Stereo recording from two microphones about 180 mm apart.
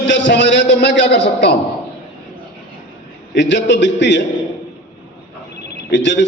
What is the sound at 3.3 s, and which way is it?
Speech, 75° left (ahead or behind).